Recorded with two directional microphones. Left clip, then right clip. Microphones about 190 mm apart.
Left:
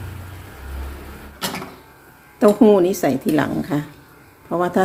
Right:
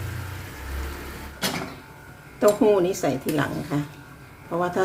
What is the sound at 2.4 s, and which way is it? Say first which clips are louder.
Speech: left 5 dB; 35° left (ahead or behind).